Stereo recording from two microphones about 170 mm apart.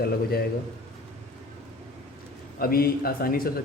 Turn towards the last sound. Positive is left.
turn(degrees=60)  # may be behind; listen again after turning